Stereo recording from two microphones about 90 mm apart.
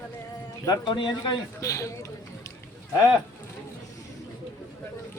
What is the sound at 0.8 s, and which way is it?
Speech, 60° left (ahead or behind).